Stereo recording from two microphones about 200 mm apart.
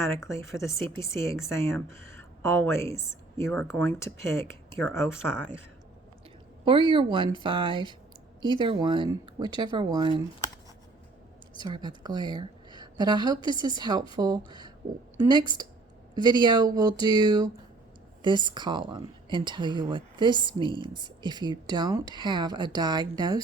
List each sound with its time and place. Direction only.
0.0 s speech: 15° left (ahead or behind)
6.7 s a woman's voice: 25° right (ahead or behind)
11.6 s a woman's voice: 20° right (ahead or behind)
16.2 s a woman's voice: 20° right (ahead or behind)